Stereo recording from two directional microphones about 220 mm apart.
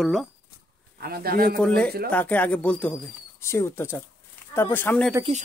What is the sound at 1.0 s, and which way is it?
Speech, 45° right (ahead or behind).